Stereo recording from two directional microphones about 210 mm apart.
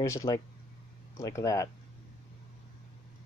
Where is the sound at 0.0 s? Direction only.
15° left (ahead or behind).